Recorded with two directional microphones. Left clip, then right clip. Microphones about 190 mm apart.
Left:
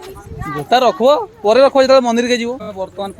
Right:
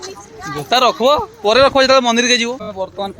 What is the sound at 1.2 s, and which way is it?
Speech, 15° left (ahead or behind).